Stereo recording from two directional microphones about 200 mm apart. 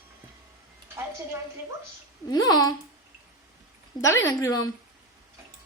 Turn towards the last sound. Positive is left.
turn(degrees=15)  # may be behind; listen again after turning